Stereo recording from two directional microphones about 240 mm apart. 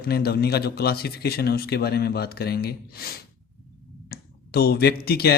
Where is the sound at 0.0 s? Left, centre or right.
Left.